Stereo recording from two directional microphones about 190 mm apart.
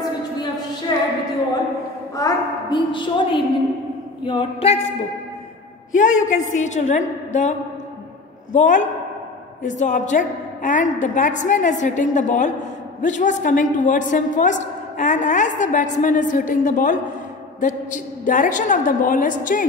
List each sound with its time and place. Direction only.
0.9 s a sound: 20° left (ahead or behind)
2.1 s a woman's voice: 20° left (ahead or behind)
5.9 s a woman's voice: 40° left (ahead or behind)
8.5 s a woman's voice: 40° left (ahead or behind)